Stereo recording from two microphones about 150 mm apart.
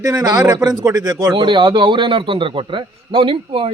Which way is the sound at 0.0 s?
25° right (ahead or behind).